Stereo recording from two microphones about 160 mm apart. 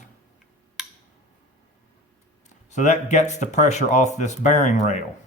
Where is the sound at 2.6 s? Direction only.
50° left (ahead or behind).